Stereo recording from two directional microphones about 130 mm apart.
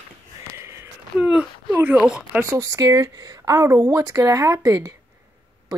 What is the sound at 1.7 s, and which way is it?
Speech, 15° right (ahead or behind).